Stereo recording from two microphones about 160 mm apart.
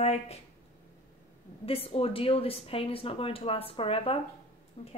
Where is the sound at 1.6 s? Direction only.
35° left (ahead or behind).